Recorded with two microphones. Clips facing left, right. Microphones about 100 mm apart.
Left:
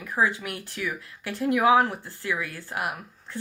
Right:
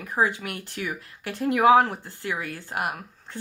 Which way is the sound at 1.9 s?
20° right (ahead or behind).